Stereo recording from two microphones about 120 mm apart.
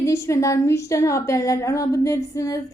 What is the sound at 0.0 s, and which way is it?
A woman's voice, 25° left (ahead or behind).